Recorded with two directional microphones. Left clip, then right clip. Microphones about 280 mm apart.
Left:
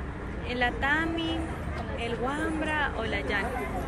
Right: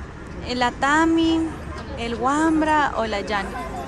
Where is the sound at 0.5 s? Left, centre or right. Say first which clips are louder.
Right 7 dB; right.